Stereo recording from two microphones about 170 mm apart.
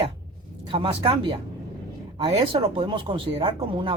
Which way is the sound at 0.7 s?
30° right (ahead or behind).